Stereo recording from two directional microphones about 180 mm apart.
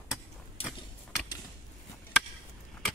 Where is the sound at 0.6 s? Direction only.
30° left (ahead or behind).